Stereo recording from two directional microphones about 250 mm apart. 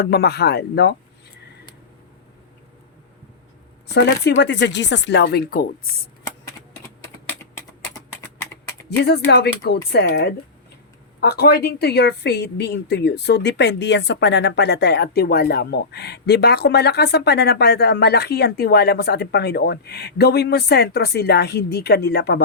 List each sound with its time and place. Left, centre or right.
0.0 s speech: left
3.8 s speech: left
9.0 s speech: left